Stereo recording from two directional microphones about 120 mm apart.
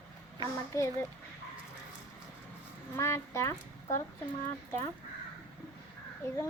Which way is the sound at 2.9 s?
20° left (ahead or behind).